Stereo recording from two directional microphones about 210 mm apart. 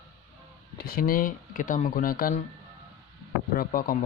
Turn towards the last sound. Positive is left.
turn(degrees=45)  # may be behind; listen again after turning